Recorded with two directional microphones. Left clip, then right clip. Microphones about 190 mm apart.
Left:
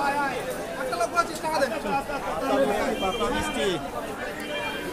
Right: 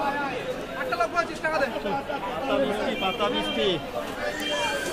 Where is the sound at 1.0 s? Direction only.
25° left (ahead or behind).